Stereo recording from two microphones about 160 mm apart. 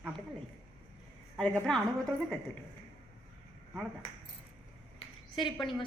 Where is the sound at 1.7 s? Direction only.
5° left (ahead or behind).